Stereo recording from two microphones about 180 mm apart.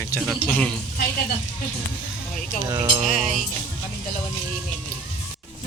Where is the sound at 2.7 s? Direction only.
30° right (ahead or behind).